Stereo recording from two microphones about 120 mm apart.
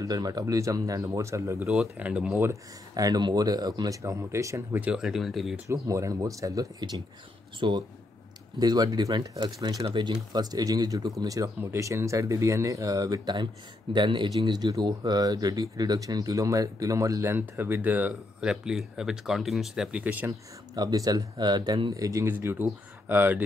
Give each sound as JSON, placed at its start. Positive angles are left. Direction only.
{"t": 0.0, "sound": "speech", "side_deg": -30}
{"t": 1.7, "sound": "speech", "side_deg": -5}
{"t": 2.9, "sound": "speech", "side_deg": -35}
{"t": 4.7, "sound": "speech", "side_deg": -10}
{"t": 5.7, "sound": "speech", "side_deg": -25}
{"t": 20.7, "sound": "speech", "side_deg": -30}
{"t": 21.9, "sound": "speech", "side_deg": -25}